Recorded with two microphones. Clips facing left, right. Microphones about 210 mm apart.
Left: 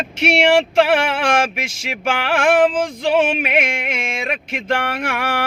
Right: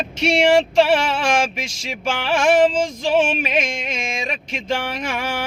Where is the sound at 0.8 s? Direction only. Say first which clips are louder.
Left 1 dB; 55° left (ahead or behind).